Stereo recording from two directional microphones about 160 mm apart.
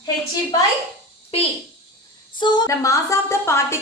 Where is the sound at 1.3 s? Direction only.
40° left (ahead or behind).